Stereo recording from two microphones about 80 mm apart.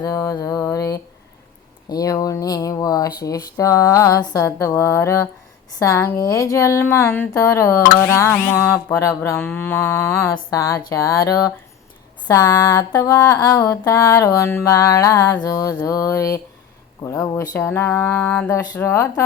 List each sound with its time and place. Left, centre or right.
0.0 s a sound: left
1.9 s speech: left
8.5 s mantra: left
10.5 s speech: left
17.6 s mantra: left
18.9 s speech: left